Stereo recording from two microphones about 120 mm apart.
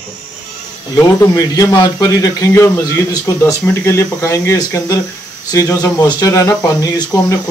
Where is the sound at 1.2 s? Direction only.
30° left (ahead or behind).